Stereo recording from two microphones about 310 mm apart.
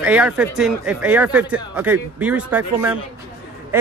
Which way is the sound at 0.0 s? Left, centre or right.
Centre.